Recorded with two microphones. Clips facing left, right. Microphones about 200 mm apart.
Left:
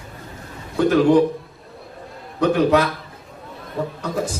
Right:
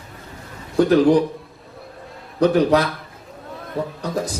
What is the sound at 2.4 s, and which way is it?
Speech, 35° right (ahead or behind).